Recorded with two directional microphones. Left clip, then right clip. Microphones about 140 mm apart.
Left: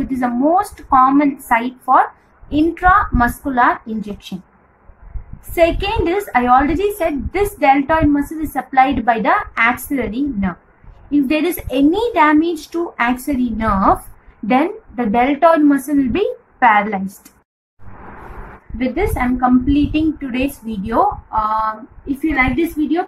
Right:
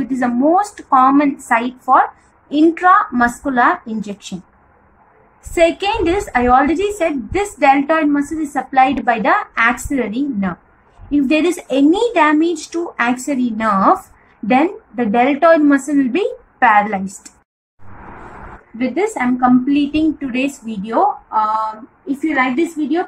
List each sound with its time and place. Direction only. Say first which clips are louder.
0.0 s a woman's voice: right 1 dB; centre (ahead or behind)
4.0 s speech: right 1 dB; 20° right (ahead or behind)
5.6 s a woman's voice: right 1 dB; 5° right (ahead or behind)
12.4 s speech: even; 30° left (ahead or behind)
12.8 s a woman's voice: even; 15° right (ahead or behind)
18.2 s a woman's voice: right 1 dB; centre (ahead or behind)